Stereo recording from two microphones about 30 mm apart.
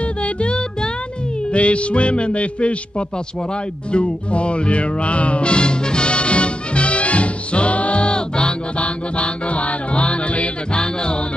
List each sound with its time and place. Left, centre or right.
0.0 s music: left
1.5 s a man's voice: left
3.9 s music: left
8.8 s music: left
10.7 s a man's voice: left